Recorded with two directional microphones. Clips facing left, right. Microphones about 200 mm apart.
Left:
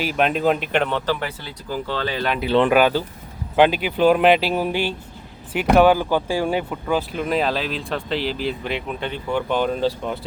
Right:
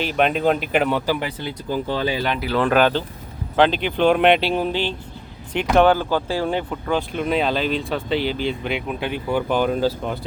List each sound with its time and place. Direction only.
0.0 s speech: 5° left (ahead or behind); by 2.2 s 10° right (ahead or behind)
2.4 s speech: 25° left (ahead or behind)
2.7 s speech: 10° left (ahead or behind)